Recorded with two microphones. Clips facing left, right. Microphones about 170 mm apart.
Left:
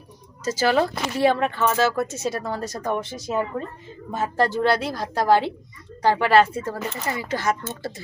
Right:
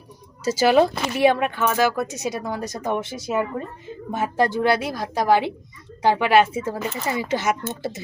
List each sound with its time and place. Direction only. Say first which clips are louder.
0.4 s speech: right 4 dB; 10° right (ahead or behind)
4.2 s speech: right 1 dB; 15° right (ahead or behind)